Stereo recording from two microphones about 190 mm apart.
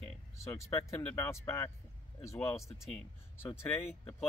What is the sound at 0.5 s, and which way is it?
Speech, 15° left (ahead or behind).